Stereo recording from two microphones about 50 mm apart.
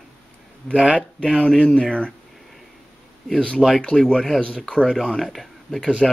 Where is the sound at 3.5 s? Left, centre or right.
Centre.